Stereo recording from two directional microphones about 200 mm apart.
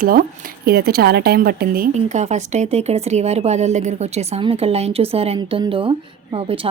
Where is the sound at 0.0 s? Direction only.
45° right (ahead or behind).